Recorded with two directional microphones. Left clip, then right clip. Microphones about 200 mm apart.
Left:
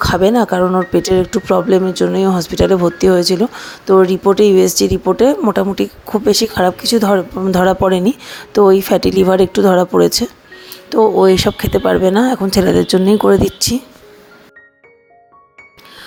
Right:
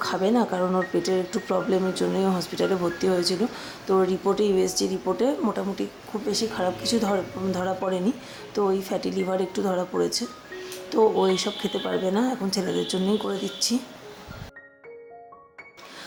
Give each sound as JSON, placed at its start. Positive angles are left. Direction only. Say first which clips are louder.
{"t": 0.0, "sound": "speech", "louder": "left 11 dB", "side_deg": 40}